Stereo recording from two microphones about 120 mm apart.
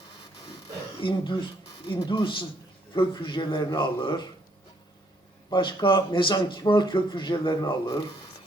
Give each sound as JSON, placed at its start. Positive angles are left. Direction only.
{"t": 0.9, "sound": "speech", "side_deg": 40}
{"t": 5.5, "sound": "speech", "side_deg": 40}